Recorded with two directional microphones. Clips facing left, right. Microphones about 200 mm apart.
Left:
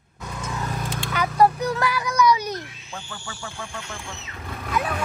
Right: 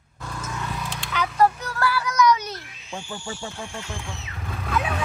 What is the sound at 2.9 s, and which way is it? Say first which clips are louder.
Speech: right 6 dB; 25° right (ahead or behind).